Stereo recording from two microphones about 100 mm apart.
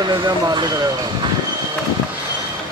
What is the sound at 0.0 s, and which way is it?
Speech, 50° right (ahead or behind).